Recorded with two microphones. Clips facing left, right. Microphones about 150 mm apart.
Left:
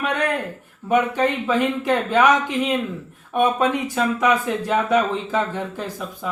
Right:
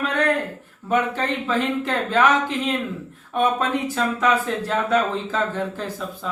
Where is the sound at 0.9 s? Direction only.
15° left (ahead or behind).